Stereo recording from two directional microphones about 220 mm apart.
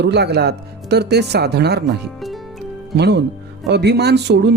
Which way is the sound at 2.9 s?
50° right (ahead or behind).